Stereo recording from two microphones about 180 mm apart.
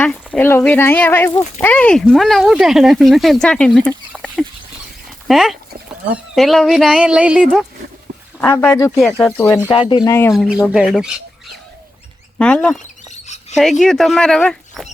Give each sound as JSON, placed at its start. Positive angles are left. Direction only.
{"t": 0.3, "sound": "speech", "side_deg": 10}
{"t": 8.4, "sound": "speech", "side_deg": 10}
{"t": 10.3, "sound": "speech", "side_deg": -5}
{"t": 12.4, "sound": "a sound", "side_deg": 5}
{"t": 13.2, "sound": "a sound", "side_deg": 40}
{"t": 13.6, "sound": "speech", "side_deg": 0}